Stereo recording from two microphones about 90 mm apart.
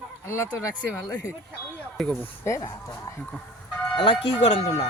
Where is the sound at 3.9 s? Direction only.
80° left.